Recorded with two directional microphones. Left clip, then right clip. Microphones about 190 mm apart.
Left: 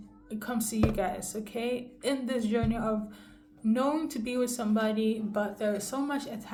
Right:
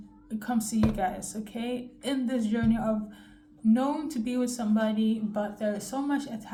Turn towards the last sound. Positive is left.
turn(degrees=30)  # may be behind; listen again after turning